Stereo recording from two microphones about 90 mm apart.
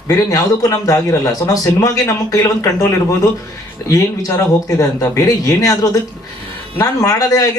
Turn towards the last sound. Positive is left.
turn(degrees=40)  # may be behind; listen again after turning